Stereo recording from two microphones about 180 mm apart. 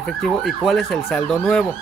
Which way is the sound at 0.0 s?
Centre (ahead or behind).